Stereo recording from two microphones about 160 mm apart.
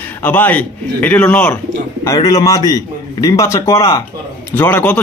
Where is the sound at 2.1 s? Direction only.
20° left (ahead or behind).